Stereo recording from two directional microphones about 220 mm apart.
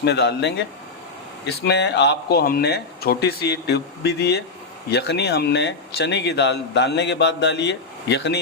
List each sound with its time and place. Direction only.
0.0 s speech: 50° left (ahead or behind)